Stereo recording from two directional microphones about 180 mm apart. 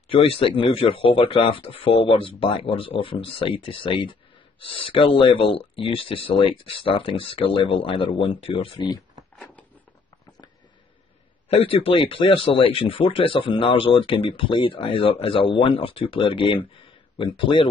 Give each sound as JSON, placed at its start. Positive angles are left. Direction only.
{"t": 0.1, "sound": "speech", "side_deg": 30}
{"t": 11.4, "sound": "speech", "side_deg": 30}